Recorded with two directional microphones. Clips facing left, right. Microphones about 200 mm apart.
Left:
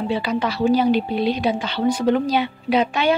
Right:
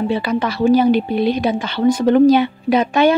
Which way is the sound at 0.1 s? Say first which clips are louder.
Right 3 dB; 50° right (ahead or behind).